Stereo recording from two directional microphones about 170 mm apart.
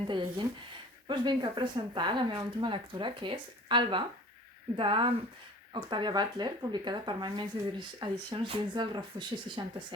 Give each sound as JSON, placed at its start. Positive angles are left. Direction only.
{"t": 0.1, "sound": "speech", "side_deg": -30}